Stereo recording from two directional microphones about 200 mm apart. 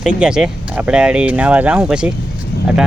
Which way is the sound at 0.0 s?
5° right (ahead or behind).